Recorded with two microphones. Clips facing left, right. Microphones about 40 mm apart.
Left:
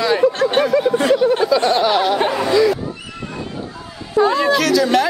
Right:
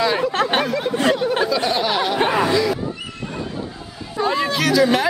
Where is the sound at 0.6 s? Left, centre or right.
Centre.